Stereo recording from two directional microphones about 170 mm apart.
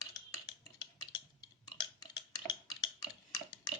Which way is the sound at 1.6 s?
25° left (ahead or behind).